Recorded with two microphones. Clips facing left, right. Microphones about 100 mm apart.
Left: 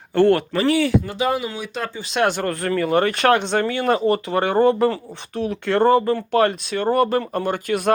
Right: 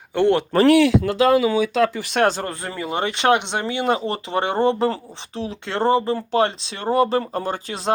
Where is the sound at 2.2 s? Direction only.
35° right (ahead or behind).